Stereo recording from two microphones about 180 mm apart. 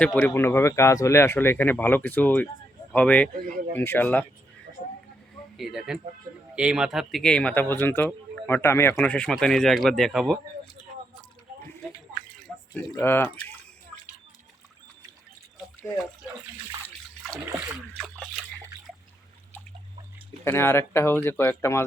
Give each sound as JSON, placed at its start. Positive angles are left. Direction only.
{"t": 0.0, "sound": "speech", "side_deg": 5}
{"t": 3.4, "sound": "speech", "side_deg": -45}
{"t": 3.8, "sound": "speech", "side_deg": 10}
{"t": 5.5, "sound": "a man's voice", "side_deg": 0}
{"t": 11.6, "sound": "a sound", "side_deg": 10}
{"t": 12.7, "sound": "speech", "side_deg": 10}
{"t": 20.4, "sound": "speech", "side_deg": 10}